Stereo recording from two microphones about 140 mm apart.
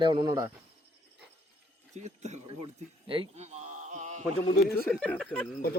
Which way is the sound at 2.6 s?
40° right (ahead or behind).